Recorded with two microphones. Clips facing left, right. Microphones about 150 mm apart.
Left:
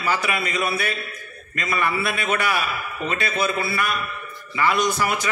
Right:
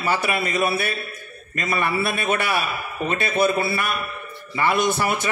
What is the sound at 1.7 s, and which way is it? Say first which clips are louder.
Speech: right 1 dB; 25° right (ahead or behind).